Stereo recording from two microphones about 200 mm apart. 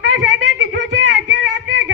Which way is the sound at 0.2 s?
65° right (ahead or behind).